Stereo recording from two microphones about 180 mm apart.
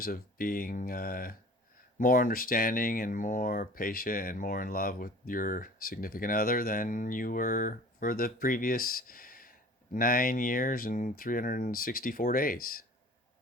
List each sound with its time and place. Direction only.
0.0 s speech: 55° left (ahead or behind)